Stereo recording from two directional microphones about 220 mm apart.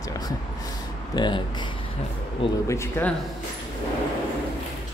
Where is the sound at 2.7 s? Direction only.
10° left (ahead or behind).